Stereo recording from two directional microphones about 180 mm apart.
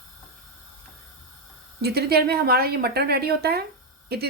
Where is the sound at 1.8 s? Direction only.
60° right (ahead or behind).